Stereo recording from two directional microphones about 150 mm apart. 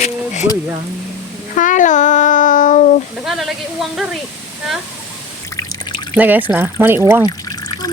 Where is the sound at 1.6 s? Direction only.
60° left (ahead or behind).